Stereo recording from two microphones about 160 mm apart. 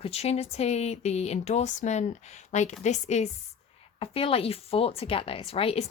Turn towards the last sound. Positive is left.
turn(degrees=35)  # may be behind; listen again after turning